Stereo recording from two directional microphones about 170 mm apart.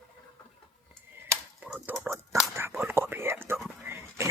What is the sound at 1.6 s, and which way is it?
Whispering, 10° right (ahead or behind).